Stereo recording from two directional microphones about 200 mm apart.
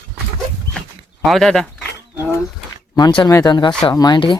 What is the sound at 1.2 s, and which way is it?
Speech, centre (ahead or behind).